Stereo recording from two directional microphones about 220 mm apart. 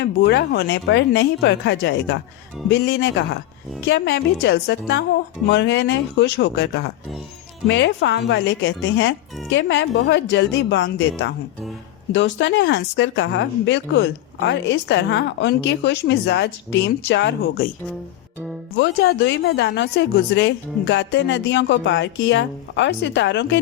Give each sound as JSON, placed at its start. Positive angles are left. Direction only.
{"t": 0.0, "sound": "a woman's voice", "side_deg": 55}
{"t": 12.1, "sound": "a woman's voice", "side_deg": 55}
{"t": 18.8, "sound": "a woman's voice", "side_deg": 50}